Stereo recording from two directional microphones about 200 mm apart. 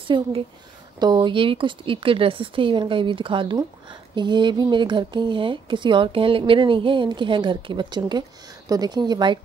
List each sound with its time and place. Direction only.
0.1 s speech: 20° right (ahead or behind)